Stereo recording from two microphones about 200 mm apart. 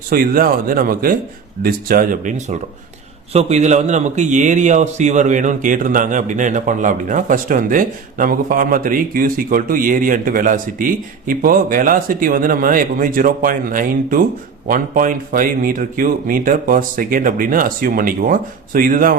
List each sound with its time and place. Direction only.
0.1 s a man's voice: 45° right (ahead or behind)